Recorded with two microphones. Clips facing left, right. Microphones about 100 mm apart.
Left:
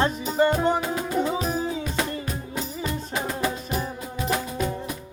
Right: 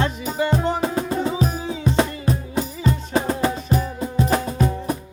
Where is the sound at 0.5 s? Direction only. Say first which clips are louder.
Right 2 dB; 35° right (ahead or behind).